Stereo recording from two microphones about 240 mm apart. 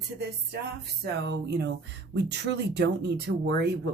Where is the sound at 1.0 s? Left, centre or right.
Right.